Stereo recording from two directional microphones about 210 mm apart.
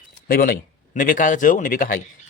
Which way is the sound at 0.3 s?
45° left (ahead or behind).